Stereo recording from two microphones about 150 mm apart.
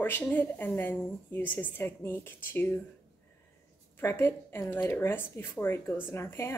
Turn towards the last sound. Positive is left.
turn(degrees=15)  # may be behind; listen again after turning